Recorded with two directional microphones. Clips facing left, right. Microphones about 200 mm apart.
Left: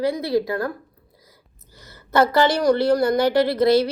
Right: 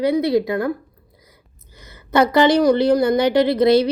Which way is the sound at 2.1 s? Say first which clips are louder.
Right 3 dB; 20° right (ahead or behind).